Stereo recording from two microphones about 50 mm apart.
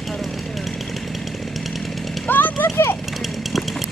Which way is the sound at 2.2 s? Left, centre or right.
Left.